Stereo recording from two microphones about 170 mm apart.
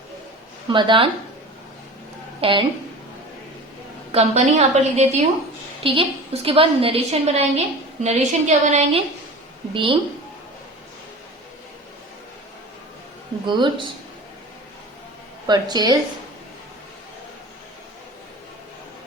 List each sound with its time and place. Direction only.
0.7 s speech: 30° right (ahead or behind)
2.4 s a woman's voice: 30° right (ahead or behind)
4.1 s a woman's voice: 40° right (ahead or behind)
5.8 s a woman's voice: 30° right (ahead or behind)
13.4 s speech: 30° right (ahead or behind)
15.4 s speech: 25° right (ahead or behind)